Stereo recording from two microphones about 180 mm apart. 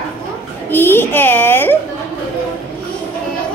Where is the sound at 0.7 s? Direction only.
10° left (ahead or behind).